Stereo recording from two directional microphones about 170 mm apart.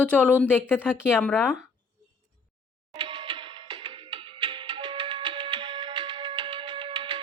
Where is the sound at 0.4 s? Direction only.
10° left (ahead or behind).